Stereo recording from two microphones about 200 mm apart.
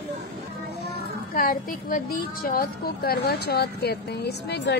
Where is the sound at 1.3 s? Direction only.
45° left (ahead or behind).